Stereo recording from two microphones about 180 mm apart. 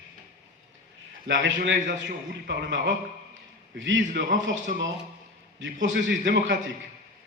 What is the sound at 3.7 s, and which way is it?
Speech, 90° right.